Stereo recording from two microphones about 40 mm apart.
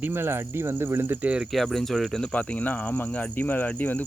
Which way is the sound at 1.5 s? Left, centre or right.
Centre.